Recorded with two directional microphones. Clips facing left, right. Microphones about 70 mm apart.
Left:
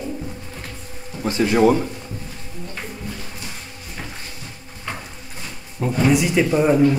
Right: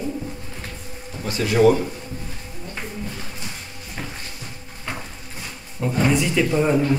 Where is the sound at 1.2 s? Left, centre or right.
Left.